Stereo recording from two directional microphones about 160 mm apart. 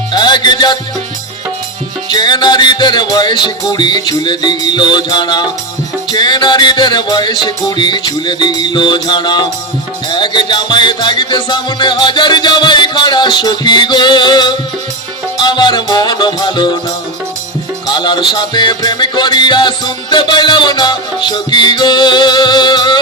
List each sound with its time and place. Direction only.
0.1 s music: 25° left (ahead or behind)
2.0 s music: 25° left (ahead or behind)
17.8 s music: 25° left (ahead or behind)